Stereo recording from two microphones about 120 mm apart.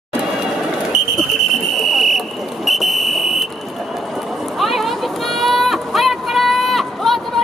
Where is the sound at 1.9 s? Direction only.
Centre (ahead or behind).